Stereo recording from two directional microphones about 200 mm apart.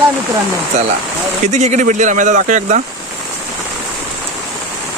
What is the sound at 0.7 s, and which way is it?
Speech, 35° right (ahead or behind).